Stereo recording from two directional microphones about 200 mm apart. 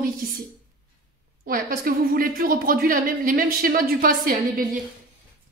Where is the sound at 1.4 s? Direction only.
45° right (ahead or behind).